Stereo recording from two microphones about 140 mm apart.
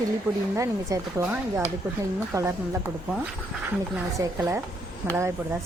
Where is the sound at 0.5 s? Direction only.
25° right (ahead or behind).